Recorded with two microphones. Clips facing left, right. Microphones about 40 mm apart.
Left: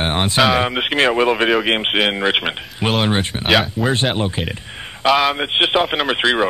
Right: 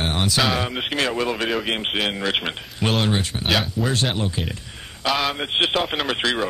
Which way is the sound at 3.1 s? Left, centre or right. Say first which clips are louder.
Left 4 dB; left.